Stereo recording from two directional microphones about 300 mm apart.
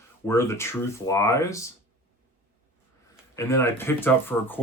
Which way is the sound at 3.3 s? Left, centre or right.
Centre.